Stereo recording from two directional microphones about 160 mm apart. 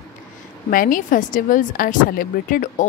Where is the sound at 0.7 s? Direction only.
60° left (ahead or behind).